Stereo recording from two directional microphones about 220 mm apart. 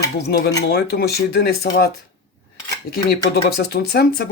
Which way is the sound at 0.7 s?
45° left (ahead or behind).